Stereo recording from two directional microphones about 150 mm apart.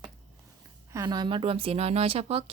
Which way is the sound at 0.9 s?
25° right (ahead or behind).